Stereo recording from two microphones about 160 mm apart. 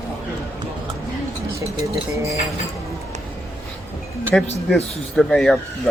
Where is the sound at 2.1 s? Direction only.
20° right (ahead or behind).